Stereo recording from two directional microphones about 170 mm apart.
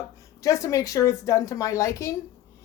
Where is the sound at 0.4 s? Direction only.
20° left (ahead or behind).